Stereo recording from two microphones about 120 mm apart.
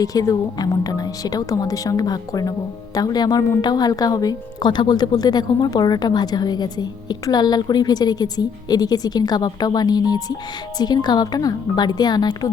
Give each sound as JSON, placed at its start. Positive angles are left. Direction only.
{"t": 0.0, "sound": "a woman's voice", "side_deg": 30}